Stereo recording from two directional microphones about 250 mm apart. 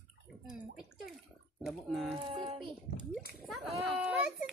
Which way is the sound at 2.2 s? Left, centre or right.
Right.